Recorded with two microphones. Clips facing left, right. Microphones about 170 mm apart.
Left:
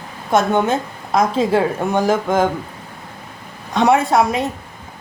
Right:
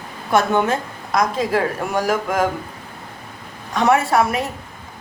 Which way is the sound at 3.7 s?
15° left (ahead or behind).